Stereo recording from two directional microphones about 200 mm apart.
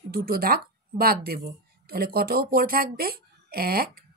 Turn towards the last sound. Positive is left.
turn(degrees=-50)  # may be behind; listen again after turning